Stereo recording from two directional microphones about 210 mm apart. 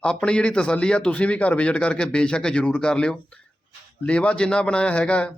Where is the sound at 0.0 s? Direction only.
5° left (ahead or behind).